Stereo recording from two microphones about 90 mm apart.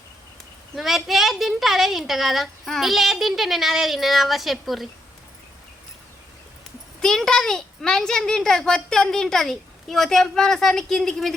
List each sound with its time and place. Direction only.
0.8 s a child's voice: centre (ahead or behind)
7.0 s a child's voice: 5° left (ahead or behind)